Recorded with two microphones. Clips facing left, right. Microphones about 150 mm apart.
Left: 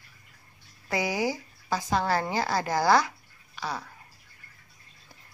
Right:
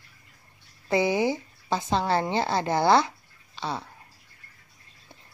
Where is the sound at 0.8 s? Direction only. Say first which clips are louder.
Right 5 dB; 25° right (ahead or behind).